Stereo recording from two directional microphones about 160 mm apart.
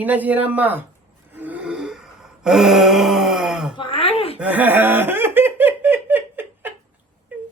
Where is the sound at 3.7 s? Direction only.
30° left (ahead or behind).